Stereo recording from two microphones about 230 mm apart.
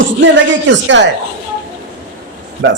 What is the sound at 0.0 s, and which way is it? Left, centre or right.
Speech, right.